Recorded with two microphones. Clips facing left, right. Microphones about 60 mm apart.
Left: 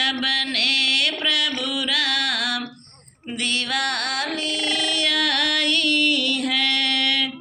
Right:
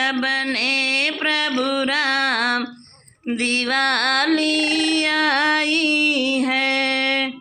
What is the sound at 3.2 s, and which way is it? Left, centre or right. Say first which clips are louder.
Female singing: right 5 dB; right.